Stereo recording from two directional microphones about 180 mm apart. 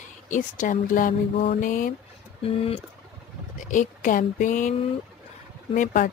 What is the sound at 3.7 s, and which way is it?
Speech, 45° left (ahead or behind).